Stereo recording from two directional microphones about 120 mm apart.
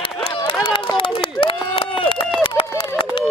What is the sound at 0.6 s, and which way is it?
Run, 45° left (ahead or behind).